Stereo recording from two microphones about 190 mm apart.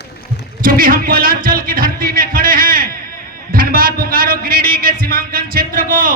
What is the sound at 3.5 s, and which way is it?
A man's voice, 50° right (ahead or behind).